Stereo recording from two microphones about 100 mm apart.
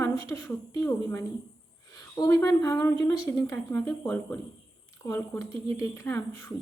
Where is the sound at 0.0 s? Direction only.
30° left (ahead or behind).